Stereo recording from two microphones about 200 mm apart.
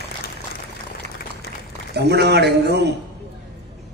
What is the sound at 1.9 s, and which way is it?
A man's voice, 55° right (ahead or behind).